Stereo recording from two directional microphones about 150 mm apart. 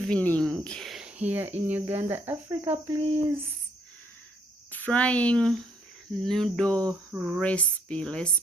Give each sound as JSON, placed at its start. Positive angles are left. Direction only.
{"t": 0.0, "sound": "speech", "side_deg": 10}
{"t": 4.7, "sound": "speech", "side_deg": 10}
{"t": 6.1, "sound": "a sound", "side_deg": 5}
{"t": 7.1, "sound": "speech", "side_deg": -5}
{"t": 7.4, "sound": "speech", "side_deg": 10}